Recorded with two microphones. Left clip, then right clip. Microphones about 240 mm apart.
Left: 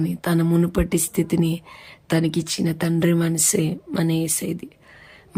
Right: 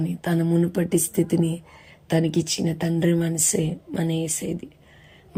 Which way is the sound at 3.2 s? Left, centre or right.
Centre.